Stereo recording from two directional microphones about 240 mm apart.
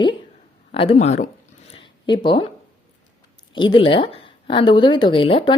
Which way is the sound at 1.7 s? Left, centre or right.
Centre.